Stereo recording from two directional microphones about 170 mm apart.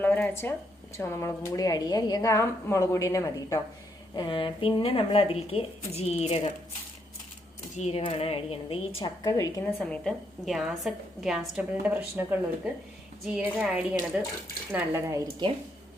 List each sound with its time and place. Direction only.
0.0 s a woman's voice: 10° left (ahead or behind); by 6.5 s 40° left (ahead or behind)
7.8 s speech: 40° left (ahead or behind); by 9.6 s 20° left (ahead or behind)
9.8 s a woman's voice: 5° left (ahead or behind); by 15.4 s 20° right (ahead or behind)